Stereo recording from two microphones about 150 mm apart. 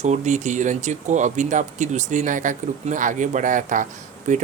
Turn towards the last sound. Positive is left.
turn(degrees=-55)  # may be behind; listen again after turning